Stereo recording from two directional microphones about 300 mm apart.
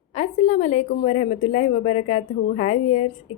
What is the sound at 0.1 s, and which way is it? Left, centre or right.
A woman's voice, left.